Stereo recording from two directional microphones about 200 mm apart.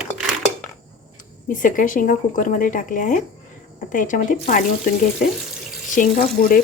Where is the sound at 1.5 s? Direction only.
40° left (ahead or behind).